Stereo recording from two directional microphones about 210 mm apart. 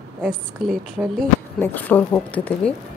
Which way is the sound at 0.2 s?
Centre (ahead or behind).